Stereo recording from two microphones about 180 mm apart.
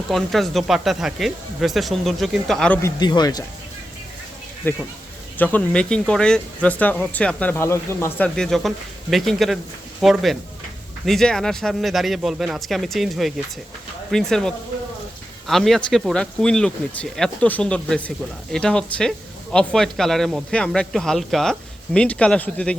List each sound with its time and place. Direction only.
0.1 s speech: centre (ahead or behind)
2.8 s speech: 25° left (ahead or behind)
4.7 s speech: 10° left (ahead or behind)
8.4 s speech: centre (ahead or behind)